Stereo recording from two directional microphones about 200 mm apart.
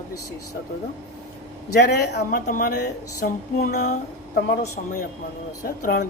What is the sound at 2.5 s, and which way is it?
Speech, 45° left (ahead or behind).